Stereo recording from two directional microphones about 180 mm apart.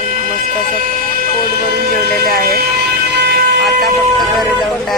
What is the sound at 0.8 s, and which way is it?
Speech, 50° right (ahead or behind).